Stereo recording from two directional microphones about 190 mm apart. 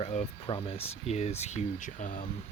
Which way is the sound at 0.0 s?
35° left (ahead or behind).